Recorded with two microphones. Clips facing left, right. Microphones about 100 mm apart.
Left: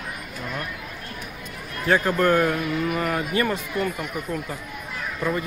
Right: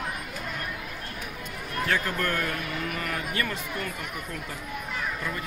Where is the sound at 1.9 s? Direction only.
25° left (ahead or behind).